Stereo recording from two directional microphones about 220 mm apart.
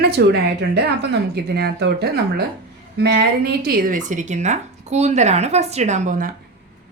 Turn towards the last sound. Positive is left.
turn(degrees=-35)  # may be behind; listen again after turning